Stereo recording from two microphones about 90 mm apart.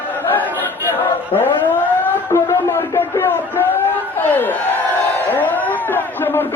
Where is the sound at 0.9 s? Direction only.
25° left (ahead or behind).